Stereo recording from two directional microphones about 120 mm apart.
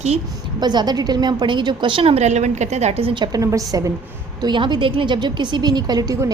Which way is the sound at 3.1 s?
40° right (ahead or behind).